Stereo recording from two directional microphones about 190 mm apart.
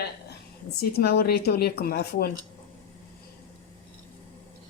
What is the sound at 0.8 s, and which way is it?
A woman's voice, 55° left (ahead or behind).